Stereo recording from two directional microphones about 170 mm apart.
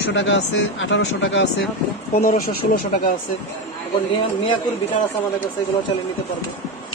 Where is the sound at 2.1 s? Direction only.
60° left (ahead or behind).